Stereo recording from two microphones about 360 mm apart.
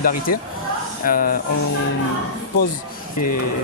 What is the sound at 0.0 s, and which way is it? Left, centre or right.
A man's voice, left.